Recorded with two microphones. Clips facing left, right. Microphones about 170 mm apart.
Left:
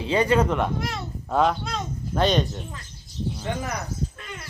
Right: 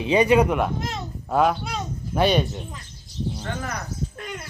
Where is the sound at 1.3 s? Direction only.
5° right (ahead or behind).